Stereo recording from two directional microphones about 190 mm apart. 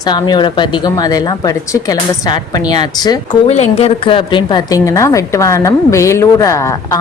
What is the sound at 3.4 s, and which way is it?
A woman's voice, 35° left (ahead or behind).